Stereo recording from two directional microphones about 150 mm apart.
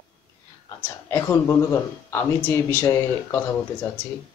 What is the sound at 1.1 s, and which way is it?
A man's voice, 20° left (ahead or behind).